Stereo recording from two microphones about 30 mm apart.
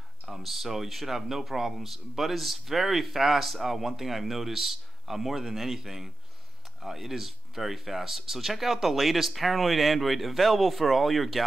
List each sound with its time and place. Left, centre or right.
0.3 s speech: centre